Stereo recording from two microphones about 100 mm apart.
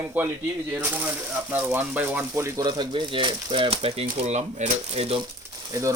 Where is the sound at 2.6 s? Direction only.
45° right (ahead or behind); by 5.2 s 90° right.